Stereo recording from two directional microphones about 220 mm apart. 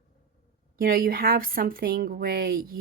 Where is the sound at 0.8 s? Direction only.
40° right (ahead or behind).